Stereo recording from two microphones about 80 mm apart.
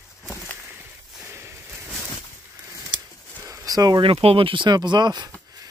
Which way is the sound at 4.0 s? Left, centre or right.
Right.